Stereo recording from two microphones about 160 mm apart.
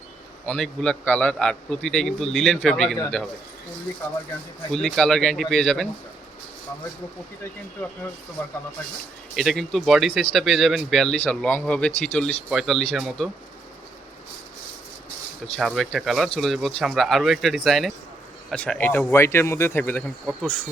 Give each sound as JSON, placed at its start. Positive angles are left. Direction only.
{"t": 0.4, "sound": "speech", "side_deg": 5}
{"t": 4.7, "sound": "speech", "side_deg": 0}
{"t": 8.4, "sound": "speech", "side_deg": 10}
{"t": 15.5, "sound": "speech", "side_deg": 0}